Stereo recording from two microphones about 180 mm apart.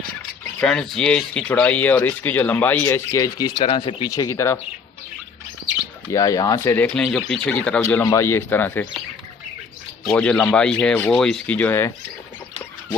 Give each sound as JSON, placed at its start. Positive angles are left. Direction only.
{"t": 0.6, "sound": "speech", "side_deg": 5}
{"t": 4.1, "sound": "speech", "side_deg": 15}
{"t": 6.1, "sound": "speech", "side_deg": 20}
{"t": 6.9, "sound": "speech", "side_deg": 5}
{"t": 10.0, "sound": "speech", "side_deg": 5}